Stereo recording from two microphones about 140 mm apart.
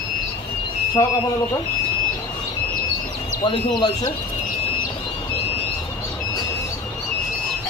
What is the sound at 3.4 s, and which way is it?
Speech, 35° left (ahead or behind).